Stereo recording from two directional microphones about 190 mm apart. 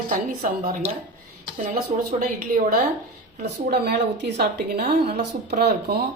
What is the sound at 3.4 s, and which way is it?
Speech, 60° right (ahead or behind).